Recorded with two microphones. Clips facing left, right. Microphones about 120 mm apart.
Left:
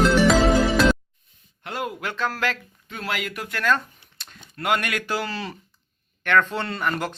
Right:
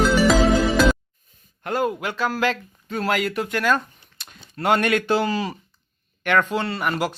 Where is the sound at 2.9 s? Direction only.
40° right (ahead or behind).